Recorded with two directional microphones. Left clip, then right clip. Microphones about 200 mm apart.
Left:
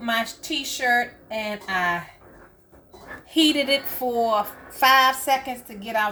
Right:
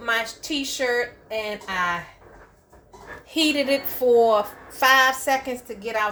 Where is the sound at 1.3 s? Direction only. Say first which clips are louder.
Left 1 dB; 45° right (ahead or behind).